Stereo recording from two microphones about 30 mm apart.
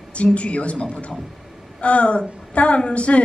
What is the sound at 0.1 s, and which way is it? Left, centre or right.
A woman's voice, left.